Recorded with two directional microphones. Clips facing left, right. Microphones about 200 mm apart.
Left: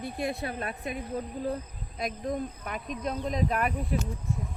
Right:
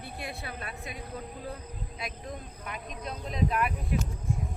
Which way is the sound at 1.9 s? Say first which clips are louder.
Left 10 dB; 45° left (ahead or behind).